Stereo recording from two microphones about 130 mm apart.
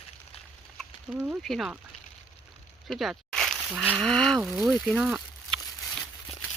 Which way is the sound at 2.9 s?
Centre (ahead or behind).